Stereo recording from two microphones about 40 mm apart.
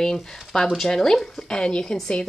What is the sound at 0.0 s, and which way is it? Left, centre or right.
A woman's voice, centre.